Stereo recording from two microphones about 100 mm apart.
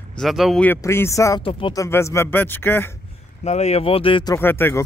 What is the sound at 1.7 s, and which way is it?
Speech, 30° left (ahead or behind).